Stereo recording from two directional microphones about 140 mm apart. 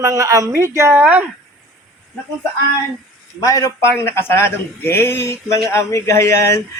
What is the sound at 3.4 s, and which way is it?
A man's voice, 25° left (ahead or behind).